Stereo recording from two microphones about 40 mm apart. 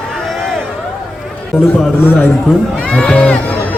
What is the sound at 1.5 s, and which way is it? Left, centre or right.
Speech, left.